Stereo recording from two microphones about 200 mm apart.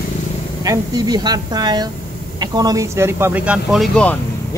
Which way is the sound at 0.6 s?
20° right (ahead or behind).